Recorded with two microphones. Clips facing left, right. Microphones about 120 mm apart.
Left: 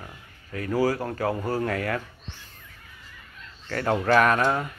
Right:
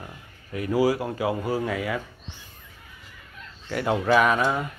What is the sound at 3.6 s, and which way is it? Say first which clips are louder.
Speech: even; 10° right (ahead or behind).